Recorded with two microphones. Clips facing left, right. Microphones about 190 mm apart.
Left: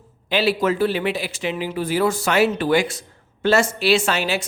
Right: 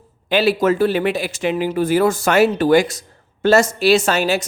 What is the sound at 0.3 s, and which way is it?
Speech, 45° right (ahead or behind).